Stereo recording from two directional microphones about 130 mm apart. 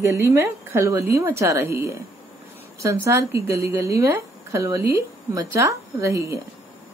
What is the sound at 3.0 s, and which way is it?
A woman's voice, 20° right (ahead or behind).